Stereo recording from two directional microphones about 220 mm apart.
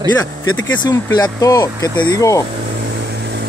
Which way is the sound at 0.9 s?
20° left (ahead or behind).